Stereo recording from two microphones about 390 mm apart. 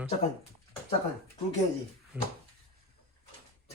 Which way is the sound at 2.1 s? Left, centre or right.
Centre.